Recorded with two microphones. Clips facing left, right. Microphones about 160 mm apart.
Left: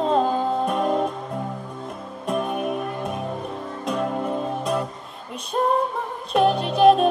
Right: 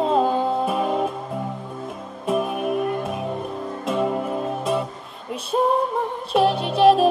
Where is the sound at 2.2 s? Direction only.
Centre (ahead or behind).